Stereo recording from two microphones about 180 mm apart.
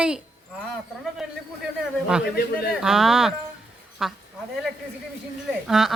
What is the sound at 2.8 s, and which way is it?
Speech, centre (ahead or behind).